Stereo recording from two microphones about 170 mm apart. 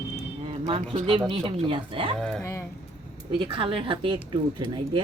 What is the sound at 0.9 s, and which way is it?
Speech, 30° right (ahead or behind).